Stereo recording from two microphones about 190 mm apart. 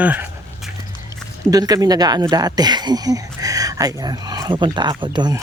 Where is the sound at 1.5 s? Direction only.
20° right (ahead or behind).